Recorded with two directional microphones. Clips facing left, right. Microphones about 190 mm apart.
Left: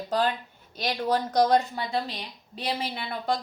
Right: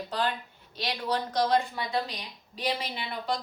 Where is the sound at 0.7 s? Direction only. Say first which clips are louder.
Left 4 dB; 45° left (ahead or behind).